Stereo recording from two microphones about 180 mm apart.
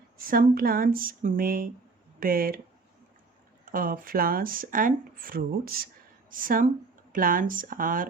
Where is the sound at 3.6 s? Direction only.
50° right (ahead or behind).